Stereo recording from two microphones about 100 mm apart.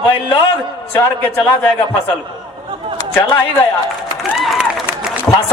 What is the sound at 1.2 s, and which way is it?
Speech, 15° left (ahead or behind).